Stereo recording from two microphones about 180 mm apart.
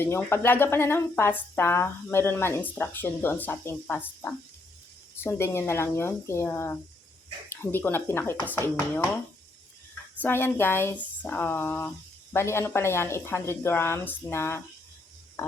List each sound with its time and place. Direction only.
0.0 s speech: 15° left (ahead or behind)
5.2 s speech: 15° left (ahead or behind)
10.2 s speech: 10° left (ahead or behind)
15.4 s a sound: 15° left (ahead or behind)